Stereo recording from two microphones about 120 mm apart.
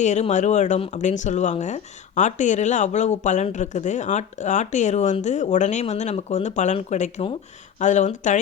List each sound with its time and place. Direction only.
0.0 s speech: 75° left (ahead or behind)
7.2 s speech: 60° left (ahead or behind)
7.8 s speech: 80° left